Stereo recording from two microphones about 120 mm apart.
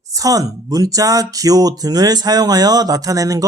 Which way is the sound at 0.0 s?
30° right (ahead or behind).